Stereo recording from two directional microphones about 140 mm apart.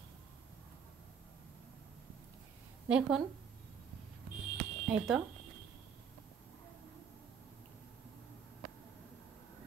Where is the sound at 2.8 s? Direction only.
10° right (ahead or behind).